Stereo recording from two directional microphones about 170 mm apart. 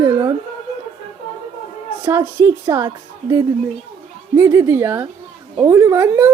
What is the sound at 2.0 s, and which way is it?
A woman's voice, 15° right (ahead or behind).